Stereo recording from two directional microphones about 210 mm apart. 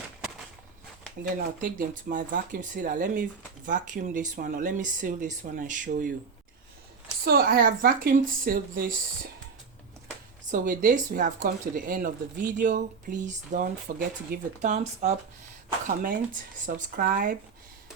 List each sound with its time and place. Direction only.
1.6 s speech: 40° right (ahead or behind)
7.3 s speech: 45° right (ahead or behind)
10.5 s speech: 40° right (ahead or behind)